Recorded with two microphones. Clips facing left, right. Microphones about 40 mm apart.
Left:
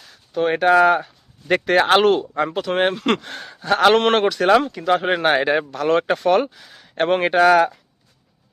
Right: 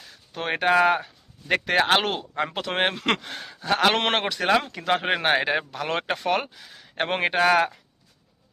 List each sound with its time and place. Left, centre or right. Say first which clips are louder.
0.3 s speech: left 8 dB; right
0.6 s speech: left 4 dB; centre
2.6 s speech: left 6 dB; right
2.8 s speech: left 3 dB; right
3.2 s speech: left 4 dB; centre
3.9 s speech: left 8 dB; centre
4.4 s speech: left 6 dB; centre
4.9 s speech: left 5 dB; centre
5.1 s speech: left 5 dB; centre